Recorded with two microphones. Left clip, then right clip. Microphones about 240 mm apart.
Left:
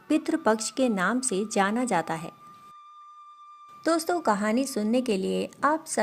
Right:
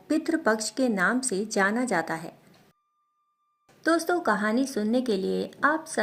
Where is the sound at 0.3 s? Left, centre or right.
Left.